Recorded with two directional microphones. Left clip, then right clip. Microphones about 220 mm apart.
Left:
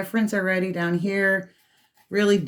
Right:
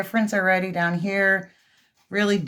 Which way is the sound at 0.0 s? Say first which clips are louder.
Right 3 dB; 25° right (ahead or behind).